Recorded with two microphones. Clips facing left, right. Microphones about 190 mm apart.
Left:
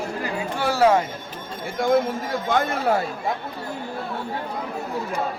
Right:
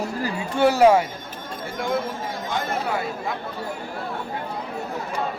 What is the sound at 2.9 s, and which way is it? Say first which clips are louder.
Speech: left 7 dB; 45° left (ahead or behind).